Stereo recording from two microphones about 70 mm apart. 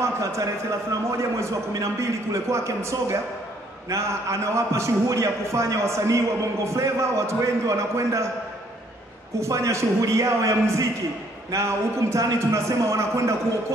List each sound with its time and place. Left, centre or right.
0.0 s a man's voice: right
9.4 s a man's voice: right